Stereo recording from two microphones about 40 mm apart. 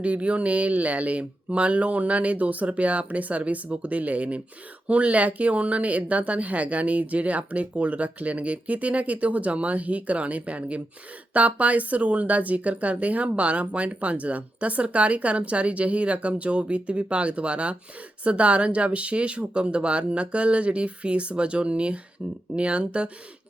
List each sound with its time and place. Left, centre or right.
0.0 s speech: right